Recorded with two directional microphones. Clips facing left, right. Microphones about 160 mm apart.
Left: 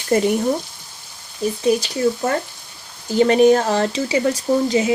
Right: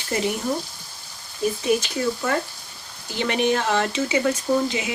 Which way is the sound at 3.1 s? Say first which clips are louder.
Left 9 dB; 40° left (ahead or behind).